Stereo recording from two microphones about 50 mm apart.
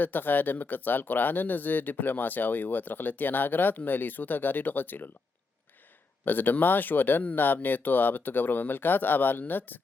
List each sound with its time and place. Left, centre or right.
0.0 s speech: left
6.2 s speech: left